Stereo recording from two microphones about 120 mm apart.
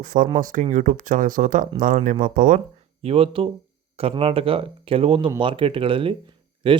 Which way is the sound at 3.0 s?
50° right (ahead or behind).